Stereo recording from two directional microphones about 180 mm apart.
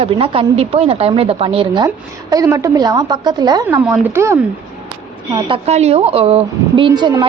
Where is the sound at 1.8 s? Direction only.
20° right (ahead or behind).